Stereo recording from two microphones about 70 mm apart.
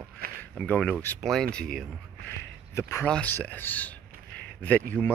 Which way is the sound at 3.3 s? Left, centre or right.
Left.